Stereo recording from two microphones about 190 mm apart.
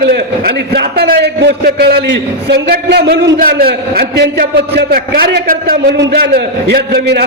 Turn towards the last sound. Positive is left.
turn(degrees=-55)  # may be behind; listen again after turning